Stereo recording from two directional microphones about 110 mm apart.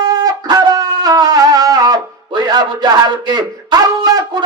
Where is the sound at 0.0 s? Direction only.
35° right (ahead or behind).